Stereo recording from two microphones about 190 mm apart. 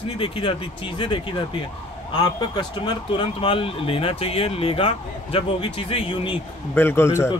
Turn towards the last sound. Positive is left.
turn(degrees=15)  # may be behind; listen again after turning